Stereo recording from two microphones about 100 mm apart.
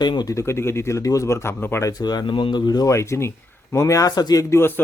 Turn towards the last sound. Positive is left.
turn(degrees=30)  # may be behind; listen again after turning